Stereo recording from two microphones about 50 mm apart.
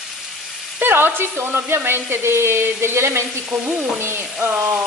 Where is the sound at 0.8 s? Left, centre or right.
Right.